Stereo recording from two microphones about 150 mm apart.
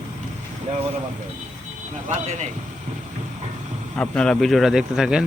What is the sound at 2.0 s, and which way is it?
Speech, 50° right (ahead or behind).